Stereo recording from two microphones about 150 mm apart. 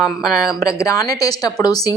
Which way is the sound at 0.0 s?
Centre (ahead or behind).